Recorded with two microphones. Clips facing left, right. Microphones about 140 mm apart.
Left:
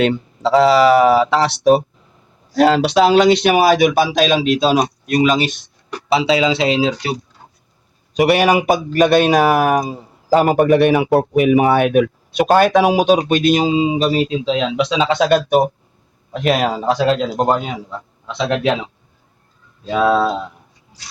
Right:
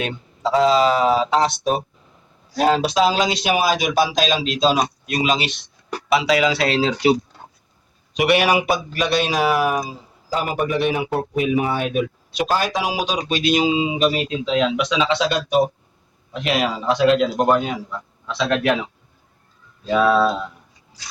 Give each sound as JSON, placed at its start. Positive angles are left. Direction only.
{"t": 0.0, "sound": "speech", "side_deg": 75}
{"t": 6.1, "sound": "speech", "side_deg": 30}
{"t": 8.1, "sound": "speech", "side_deg": 40}
{"t": 18.3, "sound": "speech", "side_deg": 20}